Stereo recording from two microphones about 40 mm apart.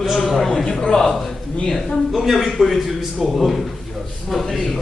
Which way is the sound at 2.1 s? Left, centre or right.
Centre.